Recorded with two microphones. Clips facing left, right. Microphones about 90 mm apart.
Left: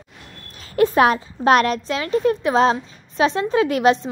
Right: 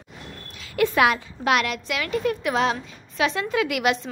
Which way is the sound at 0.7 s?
35° left (ahead or behind).